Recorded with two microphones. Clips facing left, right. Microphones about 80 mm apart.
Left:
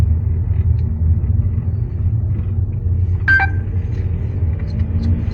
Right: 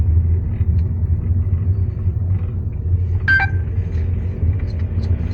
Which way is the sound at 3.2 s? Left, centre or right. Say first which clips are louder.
Left 2 dB; left.